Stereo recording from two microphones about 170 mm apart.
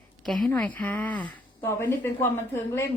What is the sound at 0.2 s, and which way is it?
A woman's voice, centre (ahead or behind).